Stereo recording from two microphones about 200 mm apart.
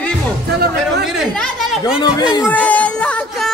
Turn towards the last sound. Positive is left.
turn(degrees=5)  # may be behind; listen again after turning